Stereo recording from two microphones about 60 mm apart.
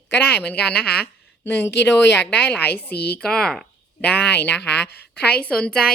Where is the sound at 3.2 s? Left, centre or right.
Centre.